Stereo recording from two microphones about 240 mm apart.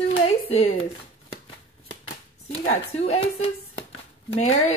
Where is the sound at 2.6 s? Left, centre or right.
Left.